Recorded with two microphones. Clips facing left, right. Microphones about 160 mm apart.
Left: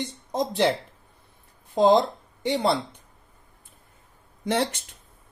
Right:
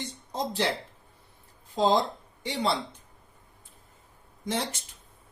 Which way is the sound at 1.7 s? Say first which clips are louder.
Left 6 dB; 60° left (ahead or behind).